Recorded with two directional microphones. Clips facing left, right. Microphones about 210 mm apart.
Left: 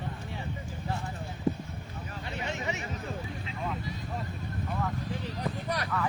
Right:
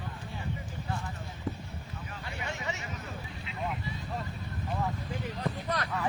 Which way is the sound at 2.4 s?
20° left (ahead or behind).